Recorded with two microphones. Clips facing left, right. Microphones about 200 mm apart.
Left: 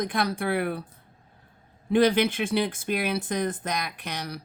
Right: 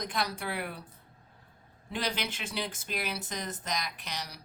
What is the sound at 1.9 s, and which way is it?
Speech, 55° left (ahead or behind).